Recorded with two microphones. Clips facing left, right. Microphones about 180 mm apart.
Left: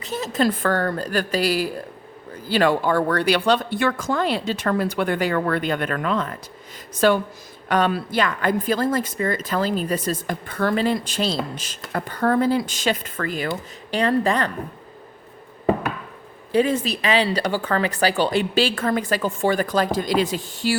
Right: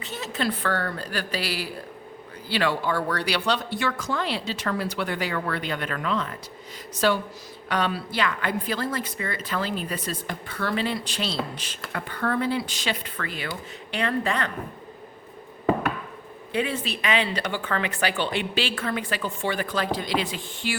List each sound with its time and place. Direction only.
0.0 s a woman's voice: 40° left (ahead or behind)
16.5 s speech: 40° left (ahead or behind)